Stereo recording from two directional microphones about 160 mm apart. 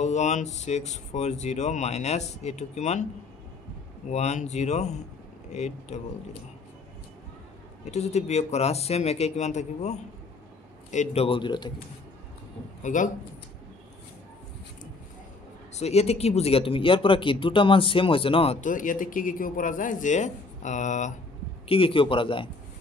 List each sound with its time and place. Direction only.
0.0 s speech: 45° left (ahead or behind)
4.1 s speech: 45° left (ahead or behind)
7.8 s speech: 45° left (ahead or behind)
11.2 s speech: 30° left (ahead or behind)
12.8 s speech: 55° left (ahead or behind)
15.7 s speech: 40° left (ahead or behind)
18.6 s speech: 55° left (ahead or behind)
21.6 s speech: 35° left (ahead or behind)